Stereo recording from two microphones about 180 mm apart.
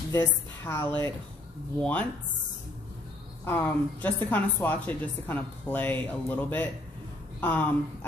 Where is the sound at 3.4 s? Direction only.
10° left (ahead or behind).